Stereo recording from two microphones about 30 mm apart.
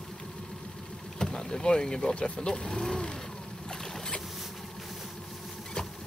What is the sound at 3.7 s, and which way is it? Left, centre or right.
Boat, centre.